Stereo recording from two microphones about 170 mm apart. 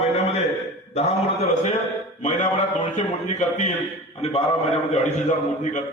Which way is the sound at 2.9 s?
45° left (ahead or behind).